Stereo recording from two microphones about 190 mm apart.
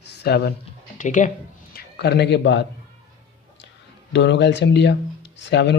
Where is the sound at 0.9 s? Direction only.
40° left (ahead or behind).